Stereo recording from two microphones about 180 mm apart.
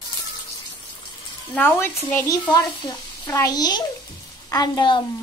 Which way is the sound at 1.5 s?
10° left (ahead or behind).